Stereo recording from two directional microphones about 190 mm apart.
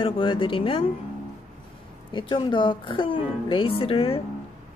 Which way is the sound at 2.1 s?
25° left (ahead or behind).